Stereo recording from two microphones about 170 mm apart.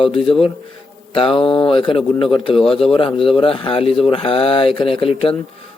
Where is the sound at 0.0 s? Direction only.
30° left (ahead or behind).